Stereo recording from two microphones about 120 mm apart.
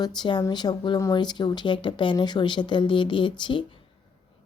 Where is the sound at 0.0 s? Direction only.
35° left (ahead or behind).